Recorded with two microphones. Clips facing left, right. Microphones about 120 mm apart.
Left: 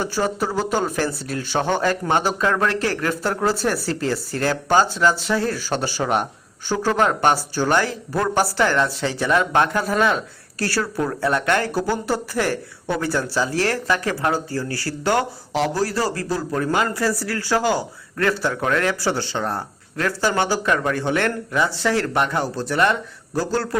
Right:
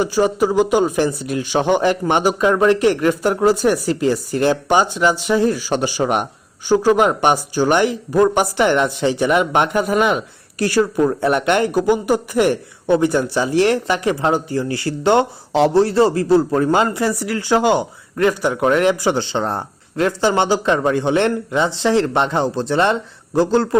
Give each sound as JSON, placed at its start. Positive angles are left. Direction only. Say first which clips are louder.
{"t": 0.0, "sound": "a man's voice", "louder": "right 6 dB", "side_deg": -15}